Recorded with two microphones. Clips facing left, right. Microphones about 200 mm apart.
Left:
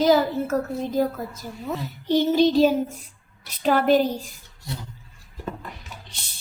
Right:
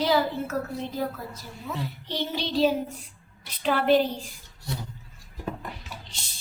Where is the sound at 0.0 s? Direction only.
45° left (ahead or behind).